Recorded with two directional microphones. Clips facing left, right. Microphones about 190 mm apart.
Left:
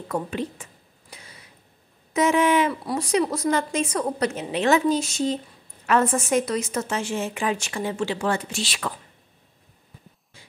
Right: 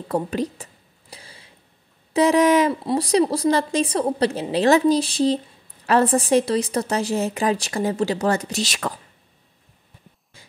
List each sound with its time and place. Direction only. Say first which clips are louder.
0.1 s a woman's voice: right 4 dB; 35° right (ahead or behind)
1.1 s a sound: right 2 dB; 30° right (ahead or behind)
2.1 s a woman's voice: right 4 dB; 35° right (ahead or behind)